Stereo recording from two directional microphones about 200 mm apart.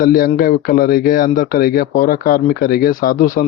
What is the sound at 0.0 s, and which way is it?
A man's voice, 45° left (ahead or behind).